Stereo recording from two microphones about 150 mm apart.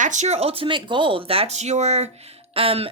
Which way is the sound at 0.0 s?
55° right (ahead or behind).